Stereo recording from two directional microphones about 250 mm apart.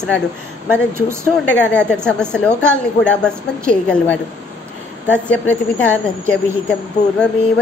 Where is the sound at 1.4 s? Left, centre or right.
Centre.